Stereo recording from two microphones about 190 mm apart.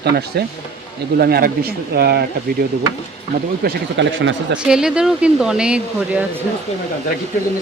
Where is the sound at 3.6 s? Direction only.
75° right (ahead or behind).